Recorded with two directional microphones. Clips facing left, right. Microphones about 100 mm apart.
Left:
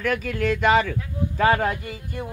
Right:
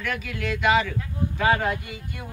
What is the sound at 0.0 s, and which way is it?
Speech, 40° left (ahead or behind).